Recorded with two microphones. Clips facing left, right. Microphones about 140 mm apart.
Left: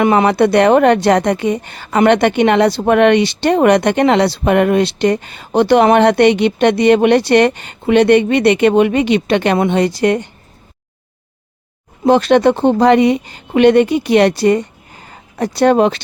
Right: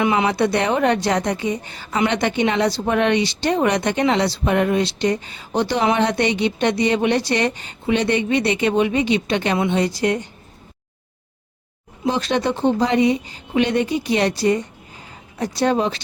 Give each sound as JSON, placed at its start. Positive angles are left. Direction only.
{"t": 0.0, "sound": "speech", "side_deg": 55}
{"t": 12.0, "sound": "speech", "side_deg": 60}